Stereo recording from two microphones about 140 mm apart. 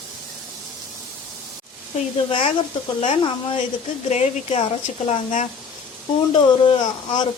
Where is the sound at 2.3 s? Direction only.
40° left (ahead or behind).